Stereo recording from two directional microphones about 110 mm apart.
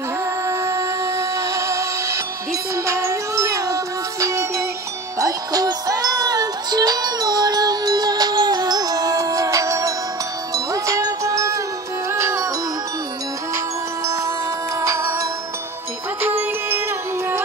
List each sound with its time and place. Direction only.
0.5 s music: 25° right (ahead or behind)
14.0 s music: 30° right (ahead or behind)
16.2 s music: 20° right (ahead or behind)